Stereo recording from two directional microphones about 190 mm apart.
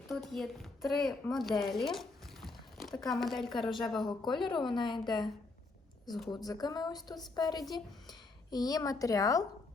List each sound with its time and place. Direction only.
0.1 s a woman's voice: centre (ahead or behind)
1.7 s a sound: centre (ahead or behind)
3.0 s a woman's voice: centre (ahead or behind)
4.0 s a woman's voice: 25° left (ahead or behind)
6.3 s a woman's voice: 20° left (ahead or behind)